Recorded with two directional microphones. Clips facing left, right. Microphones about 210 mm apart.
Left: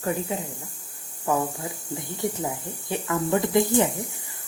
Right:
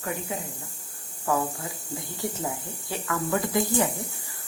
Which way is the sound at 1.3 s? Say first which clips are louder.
Left 2 dB; 20° left (ahead or behind).